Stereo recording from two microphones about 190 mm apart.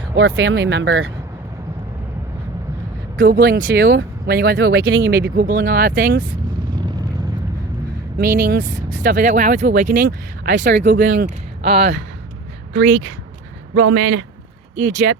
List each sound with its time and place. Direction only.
0.2 s speech: 80° right
3.2 s speech: 50° right (ahead or behind)
8.2 s speech: 50° right (ahead or behind)
13.7 s a man's voice: 75° right (ahead or behind)
14.9 s speech: 65° right (ahead or behind)